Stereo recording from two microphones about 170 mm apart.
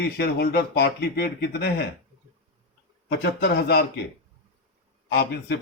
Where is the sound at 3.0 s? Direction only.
75° left (ahead or behind).